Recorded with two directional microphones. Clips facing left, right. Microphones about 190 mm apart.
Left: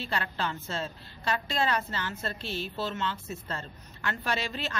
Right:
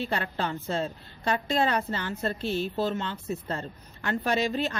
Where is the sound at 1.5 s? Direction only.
45° right (ahead or behind).